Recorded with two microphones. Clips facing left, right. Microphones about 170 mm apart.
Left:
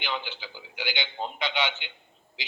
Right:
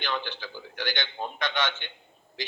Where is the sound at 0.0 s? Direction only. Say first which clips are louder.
Right 2 dB; 15° left (ahead or behind).